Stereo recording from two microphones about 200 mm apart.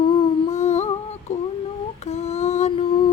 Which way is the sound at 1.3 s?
35° left (ahead or behind).